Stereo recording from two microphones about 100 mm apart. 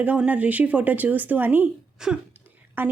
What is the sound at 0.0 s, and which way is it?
Speech, 15° right (ahead or behind).